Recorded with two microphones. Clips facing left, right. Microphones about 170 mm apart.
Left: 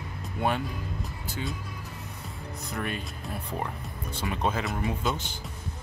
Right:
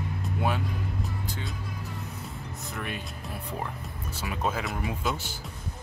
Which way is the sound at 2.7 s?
Centre (ahead or behind).